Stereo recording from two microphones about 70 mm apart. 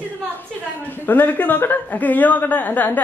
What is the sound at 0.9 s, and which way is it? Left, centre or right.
Speech, left.